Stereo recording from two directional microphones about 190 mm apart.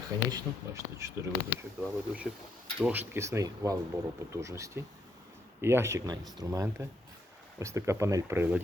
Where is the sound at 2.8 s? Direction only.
10° right (ahead or behind).